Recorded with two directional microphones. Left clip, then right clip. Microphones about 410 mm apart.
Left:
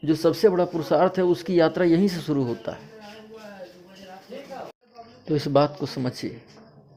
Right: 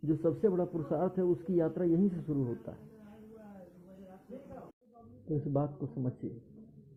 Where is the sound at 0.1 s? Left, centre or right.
Centre.